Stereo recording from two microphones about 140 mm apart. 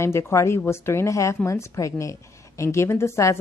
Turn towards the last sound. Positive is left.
turn(degrees=20)  # may be behind; listen again after turning